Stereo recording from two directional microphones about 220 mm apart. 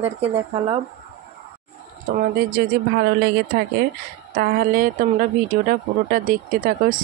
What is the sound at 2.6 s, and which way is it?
Speech, 45° right (ahead or behind).